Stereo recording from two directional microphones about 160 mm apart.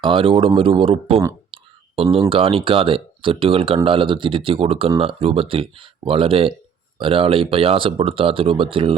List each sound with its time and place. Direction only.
0.0 s speech: 30° right (ahead or behind)
1.5 s clicking: 30° right (ahead or behind)
2.0 s speech: 35° right (ahead or behind)